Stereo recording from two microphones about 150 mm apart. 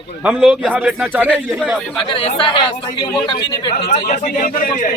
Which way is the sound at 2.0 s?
35° left (ahead or behind).